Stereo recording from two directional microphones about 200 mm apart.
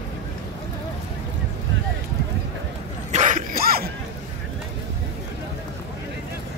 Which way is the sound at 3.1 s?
40° right (ahead or behind).